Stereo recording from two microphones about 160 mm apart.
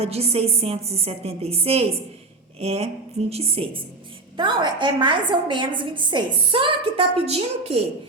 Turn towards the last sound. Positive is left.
turn(degrees=-40)  # may be behind; listen again after turning